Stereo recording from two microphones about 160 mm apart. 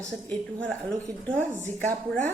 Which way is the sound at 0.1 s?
5° left (ahead or behind).